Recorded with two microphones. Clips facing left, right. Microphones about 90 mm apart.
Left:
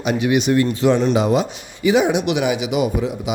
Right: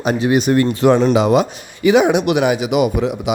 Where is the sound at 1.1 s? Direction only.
75° right (ahead or behind).